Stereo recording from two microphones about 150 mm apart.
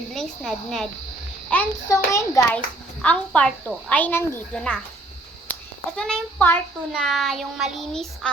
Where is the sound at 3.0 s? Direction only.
10° left (ahead or behind).